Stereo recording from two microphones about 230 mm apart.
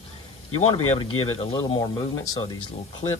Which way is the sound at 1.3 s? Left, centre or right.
Left.